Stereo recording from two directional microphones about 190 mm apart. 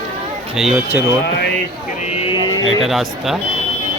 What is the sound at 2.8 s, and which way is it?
Speech, centre (ahead or behind).